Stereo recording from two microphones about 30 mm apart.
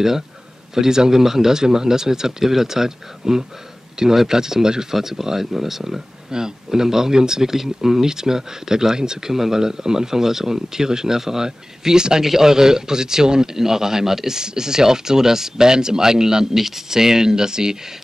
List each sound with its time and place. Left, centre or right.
0.7 s speech: centre
9.3 s a man's voice: centre